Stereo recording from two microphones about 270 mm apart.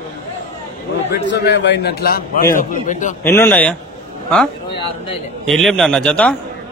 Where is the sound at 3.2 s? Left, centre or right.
Centre.